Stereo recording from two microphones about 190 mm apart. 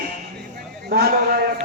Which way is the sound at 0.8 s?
55° right (ahead or behind).